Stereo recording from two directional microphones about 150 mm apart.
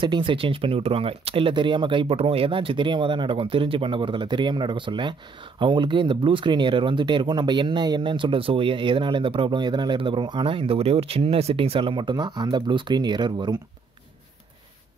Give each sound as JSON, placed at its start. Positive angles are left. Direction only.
{"t": 0.0, "sound": "speech", "side_deg": -35}